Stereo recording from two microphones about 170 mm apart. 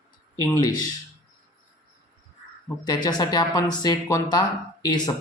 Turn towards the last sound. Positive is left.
turn(degrees=25)  # may be behind; listen again after turning